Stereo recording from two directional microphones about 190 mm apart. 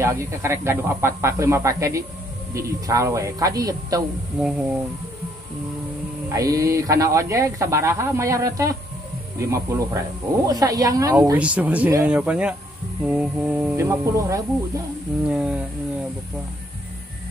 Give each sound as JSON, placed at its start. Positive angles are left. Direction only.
{"t": 0.0, "sound": "speech", "side_deg": -15}
{"t": 4.4, "sound": "speech", "side_deg": -5}
{"t": 6.2, "sound": "speech", "side_deg": -20}
{"t": 15.2, "sound": "speech", "side_deg": -5}